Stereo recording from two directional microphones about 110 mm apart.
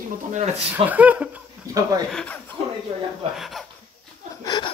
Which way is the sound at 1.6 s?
30° right (ahead or behind).